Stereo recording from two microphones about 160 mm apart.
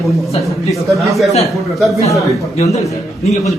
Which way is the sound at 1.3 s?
Centre (ahead or behind).